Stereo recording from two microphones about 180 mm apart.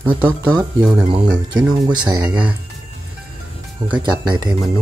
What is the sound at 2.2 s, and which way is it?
Speech, 10° right (ahead or behind).